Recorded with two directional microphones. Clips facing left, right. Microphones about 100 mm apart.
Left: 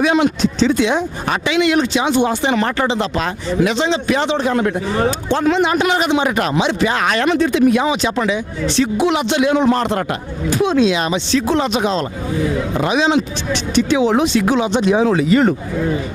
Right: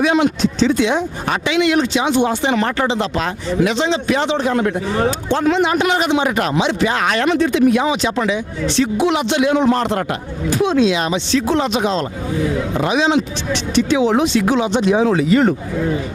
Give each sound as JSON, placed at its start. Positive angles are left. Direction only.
{"t": 0.0, "sound": "speech", "side_deg": 20}